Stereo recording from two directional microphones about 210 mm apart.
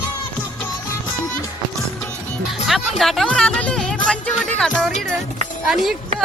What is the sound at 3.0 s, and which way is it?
Speech, centre (ahead or behind).